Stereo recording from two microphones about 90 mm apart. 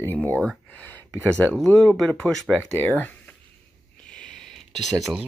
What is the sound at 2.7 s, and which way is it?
Speech, 20° left (ahead or behind).